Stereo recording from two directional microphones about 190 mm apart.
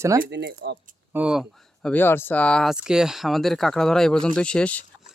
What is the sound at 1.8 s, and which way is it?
Speech, 10° left (ahead or behind).